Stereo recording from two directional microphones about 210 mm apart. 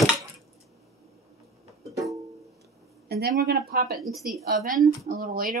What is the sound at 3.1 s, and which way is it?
Speech, 50° right (ahead or behind).